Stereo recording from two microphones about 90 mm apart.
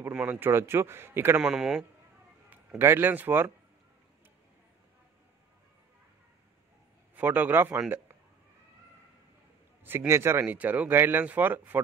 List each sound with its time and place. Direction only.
0.1 s speech: 20° right (ahead or behind)
1.4 s speech: 5° right (ahead or behind)
2.8 s speech: 25° right (ahead or behind)
7.2 s speech: 20° right (ahead or behind)
9.8 s speech: 30° right (ahead or behind)